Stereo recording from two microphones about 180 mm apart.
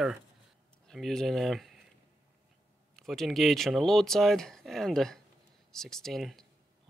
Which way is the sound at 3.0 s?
Centre (ahead or behind).